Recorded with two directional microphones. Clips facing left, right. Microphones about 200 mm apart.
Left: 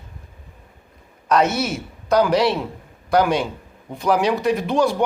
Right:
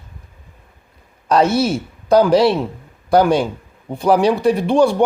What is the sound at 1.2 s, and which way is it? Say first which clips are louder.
A man's voice: right 4 dB; 30° right (ahead or behind).